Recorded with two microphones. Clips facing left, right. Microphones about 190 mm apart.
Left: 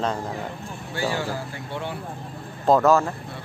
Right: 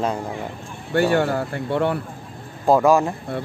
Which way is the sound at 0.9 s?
60° right (ahead or behind).